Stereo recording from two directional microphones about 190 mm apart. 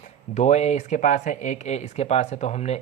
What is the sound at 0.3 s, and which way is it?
Speech, 35° left (ahead or behind).